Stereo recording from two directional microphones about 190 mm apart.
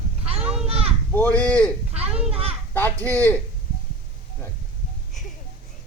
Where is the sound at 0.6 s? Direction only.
30° right (ahead or behind).